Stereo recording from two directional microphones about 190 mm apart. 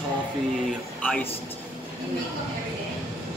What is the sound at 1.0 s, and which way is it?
Speech, 5° left (ahead or behind).